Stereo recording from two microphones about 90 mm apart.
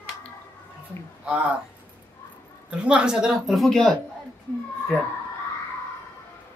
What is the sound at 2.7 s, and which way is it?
Speech, 10° right (ahead or behind).